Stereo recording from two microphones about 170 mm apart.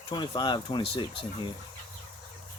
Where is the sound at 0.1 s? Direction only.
25° left (ahead or behind).